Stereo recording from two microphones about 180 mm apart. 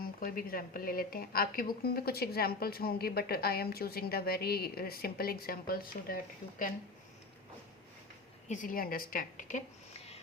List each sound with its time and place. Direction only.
0.0 s a woman's voice: 50° left (ahead or behind)
8.4 s a woman's voice: 50° left (ahead or behind)